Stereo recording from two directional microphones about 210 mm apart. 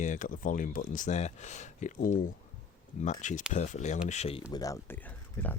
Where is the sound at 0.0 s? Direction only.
35° left (ahead or behind).